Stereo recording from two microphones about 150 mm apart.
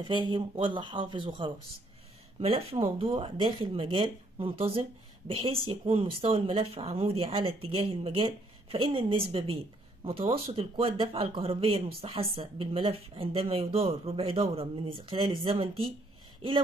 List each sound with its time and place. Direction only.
0.0 s speech: 30° right (ahead or behind)